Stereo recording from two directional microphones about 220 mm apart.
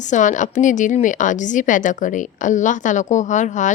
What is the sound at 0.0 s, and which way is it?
A woman's voice, 35° left (ahead or behind).